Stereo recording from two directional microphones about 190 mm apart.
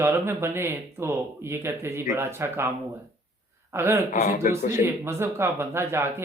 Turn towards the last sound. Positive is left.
turn(degrees=-15)  # may be behind; listen again after turning